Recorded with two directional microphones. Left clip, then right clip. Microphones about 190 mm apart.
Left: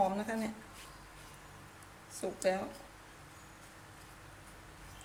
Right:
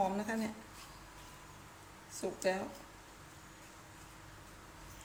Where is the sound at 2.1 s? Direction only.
20° left (ahead or behind).